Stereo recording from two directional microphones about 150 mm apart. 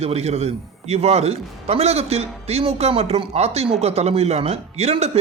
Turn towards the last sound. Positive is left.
turn(degrees=-45)  # may be behind; listen again after turning